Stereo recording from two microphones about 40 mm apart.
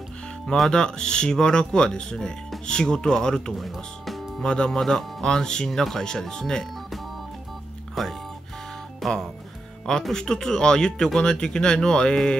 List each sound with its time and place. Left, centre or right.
0.7 s speech: centre
3.5 s speech: centre
4.4 s speech: centre
8.0 s speech: centre
9.0 s music: centre
10.1 s speech: centre